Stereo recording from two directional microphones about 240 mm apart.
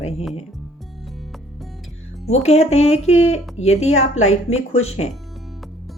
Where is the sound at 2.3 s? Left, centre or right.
Left.